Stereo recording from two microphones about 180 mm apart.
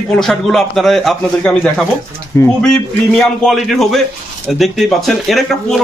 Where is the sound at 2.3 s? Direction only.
15° left (ahead or behind).